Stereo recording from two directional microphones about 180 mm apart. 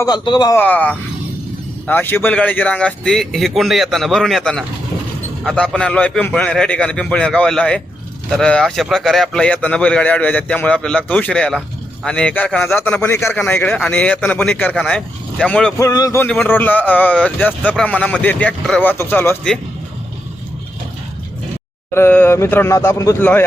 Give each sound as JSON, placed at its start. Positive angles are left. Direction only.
{"t": 0.0, "sound": "a man's voice", "side_deg": 25}
{"t": 0.5, "sound": "speech", "side_deg": 10}
{"t": 15.8, "sound": "speech", "side_deg": 20}
{"t": 21.9, "sound": "speech", "side_deg": 10}